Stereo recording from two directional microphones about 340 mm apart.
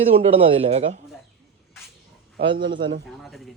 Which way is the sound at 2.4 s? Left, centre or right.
Centre.